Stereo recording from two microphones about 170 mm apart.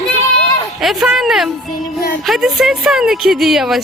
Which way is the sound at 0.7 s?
Centre (ahead or behind).